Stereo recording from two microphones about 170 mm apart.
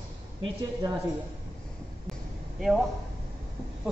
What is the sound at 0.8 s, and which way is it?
Speech, 25° right (ahead or behind).